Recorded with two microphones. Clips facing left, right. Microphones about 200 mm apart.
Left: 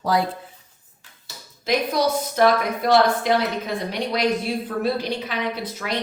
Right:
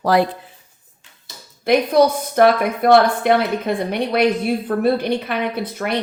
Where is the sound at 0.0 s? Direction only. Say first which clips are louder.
Right 5 dB; 75° right (ahead or behind).